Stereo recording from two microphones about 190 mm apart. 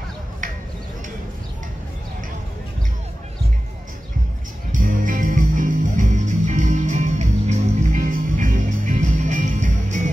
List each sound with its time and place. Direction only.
4.7 s music: 45° right (ahead or behind)